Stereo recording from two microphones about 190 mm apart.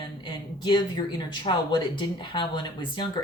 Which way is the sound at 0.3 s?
25° left (ahead or behind).